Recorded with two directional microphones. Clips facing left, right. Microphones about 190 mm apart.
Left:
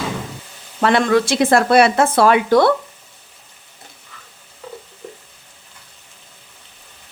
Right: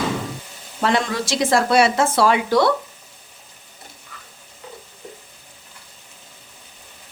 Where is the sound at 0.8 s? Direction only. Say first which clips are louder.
Left 6 dB; 60° left (ahead or behind).